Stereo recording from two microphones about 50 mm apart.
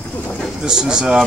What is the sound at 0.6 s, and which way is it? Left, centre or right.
Speech, centre.